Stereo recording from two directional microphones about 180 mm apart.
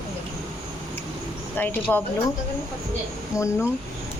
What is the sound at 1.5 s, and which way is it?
Speech, 10° left (ahead or behind).